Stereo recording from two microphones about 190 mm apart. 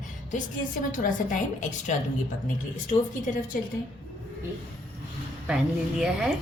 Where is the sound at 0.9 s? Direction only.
45° left (ahead or behind).